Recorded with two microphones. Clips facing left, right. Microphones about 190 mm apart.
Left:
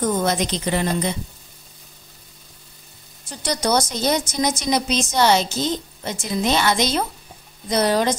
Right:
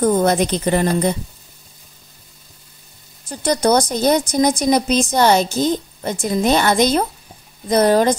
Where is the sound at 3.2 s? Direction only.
55° right (ahead or behind).